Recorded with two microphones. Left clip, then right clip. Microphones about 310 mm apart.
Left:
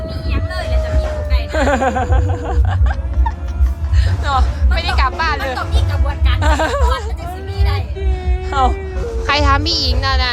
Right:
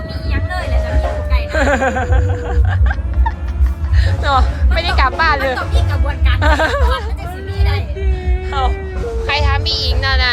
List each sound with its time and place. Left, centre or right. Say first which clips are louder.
1.5 s music: right 1 dB; centre
4.0 s speech: right 3 dB; centre
8.2 s cat: left 4 dB; left
9.2 s speech: left 3 dB; left